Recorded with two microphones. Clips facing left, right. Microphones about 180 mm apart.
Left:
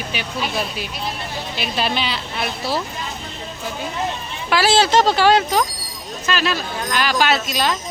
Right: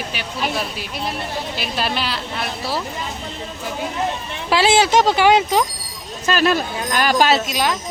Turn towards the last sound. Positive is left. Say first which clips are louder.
# even
turn(degrees=-15)  # may be behind; listen again after turning